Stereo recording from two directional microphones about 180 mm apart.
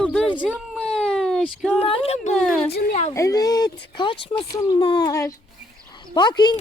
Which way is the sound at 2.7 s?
65° left (ahead or behind).